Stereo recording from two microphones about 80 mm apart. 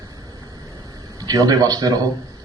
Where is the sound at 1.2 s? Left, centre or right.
Right.